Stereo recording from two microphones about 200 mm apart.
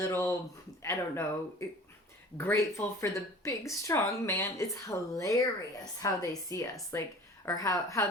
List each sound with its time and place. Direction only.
0.0 s speech: 15° left (ahead or behind)